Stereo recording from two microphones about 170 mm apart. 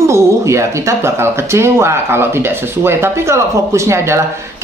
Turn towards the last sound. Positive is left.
turn(degrees=-15)  # may be behind; listen again after turning